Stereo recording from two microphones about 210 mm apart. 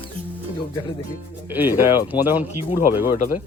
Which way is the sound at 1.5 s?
10° right (ahead or behind).